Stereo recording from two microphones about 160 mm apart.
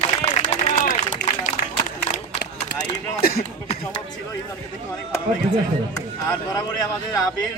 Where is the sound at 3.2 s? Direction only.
70° left (ahead or behind).